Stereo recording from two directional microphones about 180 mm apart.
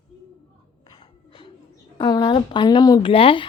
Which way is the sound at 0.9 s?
25° left (ahead or behind).